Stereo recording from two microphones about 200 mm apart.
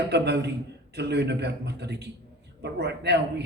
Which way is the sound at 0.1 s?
55° right (ahead or behind).